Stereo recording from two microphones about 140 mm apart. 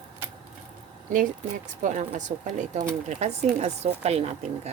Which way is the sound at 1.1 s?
70° right (ahead or behind).